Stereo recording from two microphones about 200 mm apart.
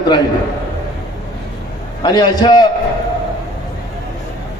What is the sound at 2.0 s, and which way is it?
Speech, 20° left (ahead or behind).